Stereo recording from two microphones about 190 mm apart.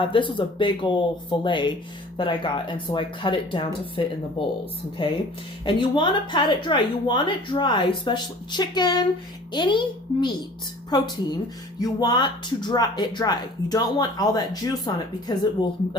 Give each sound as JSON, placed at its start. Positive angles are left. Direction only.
{"t": 0.0, "sound": "speech", "side_deg": 25}